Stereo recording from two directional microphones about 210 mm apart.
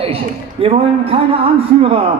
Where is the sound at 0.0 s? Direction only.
25° right (ahead or behind).